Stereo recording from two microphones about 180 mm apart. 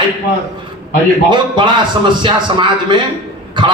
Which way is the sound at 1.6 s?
25° right (ahead or behind).